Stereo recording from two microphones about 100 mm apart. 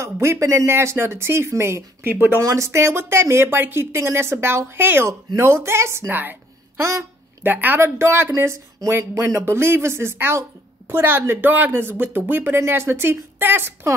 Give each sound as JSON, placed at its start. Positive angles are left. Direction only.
{"t": 0.0, "sound": "speech", "side_deg": -30}
{"t": 6.8, "sound": "a sound", "side_deg": -30}
{"t": 7.5, "sound": "speech", "side_deg": -20}